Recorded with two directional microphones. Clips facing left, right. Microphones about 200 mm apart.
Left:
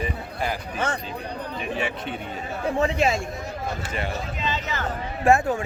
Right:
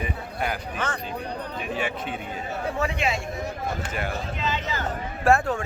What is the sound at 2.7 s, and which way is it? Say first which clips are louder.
Speech: left 6 dB; 35° left (ahead or behind).